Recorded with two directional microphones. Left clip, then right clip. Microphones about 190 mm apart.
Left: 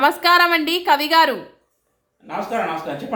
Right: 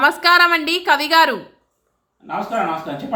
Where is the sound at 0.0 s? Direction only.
5° left (ahead or behind).